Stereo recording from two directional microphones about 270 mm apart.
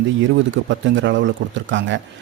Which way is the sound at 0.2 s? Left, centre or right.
Right.